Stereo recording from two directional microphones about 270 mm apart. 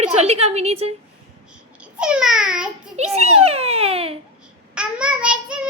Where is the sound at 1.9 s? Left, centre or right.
Centre.